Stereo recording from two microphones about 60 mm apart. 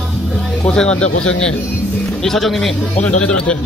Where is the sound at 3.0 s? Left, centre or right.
Centre.